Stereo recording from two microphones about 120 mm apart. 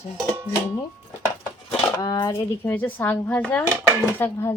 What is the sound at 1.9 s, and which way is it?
Speech, 35° left (ahead or behind).